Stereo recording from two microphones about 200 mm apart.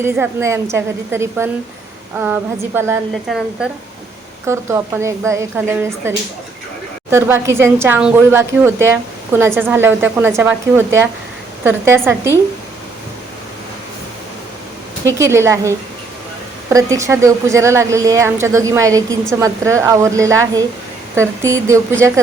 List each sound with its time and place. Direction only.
0.0 s a woman's voice: 10° right (ahead or behind)
3.2 s speech: centre (ahead or behind)
4.4 s a woman's voice: 15° right (ahead or behind)
15.0 s a woman's voice: 15° right (ahead or behind)